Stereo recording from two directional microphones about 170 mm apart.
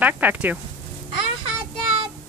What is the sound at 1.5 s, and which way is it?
Child singing, 30° right (ahead or behind).